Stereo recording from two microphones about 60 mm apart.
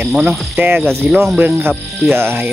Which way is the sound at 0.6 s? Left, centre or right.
Right.